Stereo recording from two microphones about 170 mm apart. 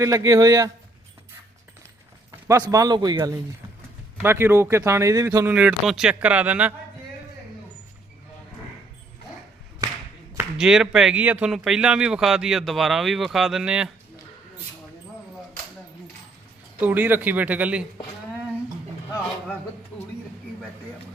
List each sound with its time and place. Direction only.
0.0 s a man's voice: 20° right (ahead or behind)
2.5 s a man's voice: 20° right (ahead or behind)
5.5 s speech: 5° right (ahead or behind)
9.8 s a sound: 20° right (ahead or behind)
10.3 s a man's voice: 5° right (ahead or behind)
16.8 s speech: 10° right (ahead or behind)